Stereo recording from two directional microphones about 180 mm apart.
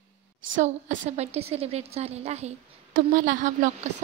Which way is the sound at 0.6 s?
40° right (ahead or behind).